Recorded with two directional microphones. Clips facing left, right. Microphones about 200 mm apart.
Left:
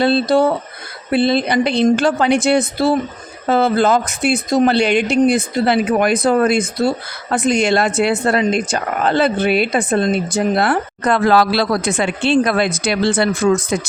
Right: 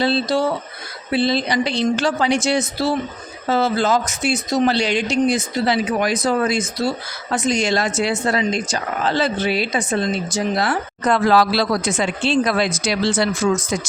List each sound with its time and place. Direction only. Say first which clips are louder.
0.0 s speech: left 5 dB; 55° left (ahead or behind)